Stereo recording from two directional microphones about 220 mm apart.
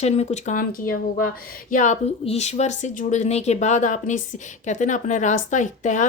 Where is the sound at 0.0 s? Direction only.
30° left (ahead or behind).